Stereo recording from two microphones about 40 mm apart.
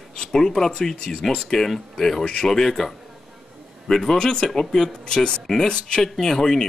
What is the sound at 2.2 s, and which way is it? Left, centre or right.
Speech, left.